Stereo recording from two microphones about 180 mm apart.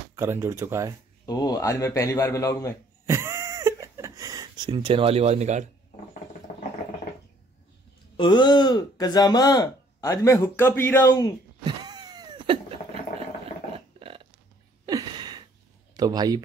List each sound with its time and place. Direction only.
0.1 s speech: 15° right (ahead or behind)
1.2 s a man's voice: 20° left (ahead or behind)
3.1 s a sound: 15° right (ahead or behind)
4.6 s speech: 30° right (ahead or behind)
8.2 s speech: 25° left (ahead or behind)
11.6 s a sound: 25° right (ahead or behind)
13.7 s burping: 30° right (ahead or behind)
14.9 s a sound: 25° right (ahead or behind)
16.0 s speech: 20° right (ahead or behind)